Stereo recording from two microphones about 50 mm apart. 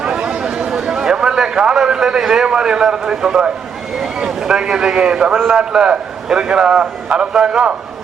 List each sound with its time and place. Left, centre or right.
0.0 s chatter: centre
0.4 s a sound: centre
2.8 s a man's voice: centre